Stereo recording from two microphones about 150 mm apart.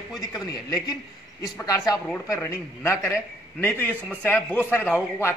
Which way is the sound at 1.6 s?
25° left (ahead or behind).